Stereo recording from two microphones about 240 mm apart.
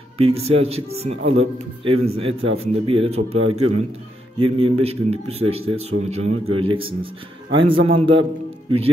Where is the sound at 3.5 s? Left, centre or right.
Right.